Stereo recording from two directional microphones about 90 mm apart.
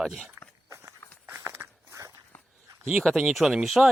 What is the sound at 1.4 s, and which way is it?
Walk, 30° right (ahead or behind).